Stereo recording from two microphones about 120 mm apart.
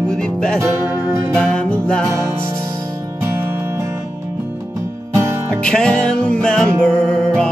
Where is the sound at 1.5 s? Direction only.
10° left (ahead or behind).